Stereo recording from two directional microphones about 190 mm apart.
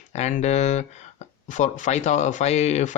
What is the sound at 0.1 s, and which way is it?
Speech, 40° left (ahead or behind).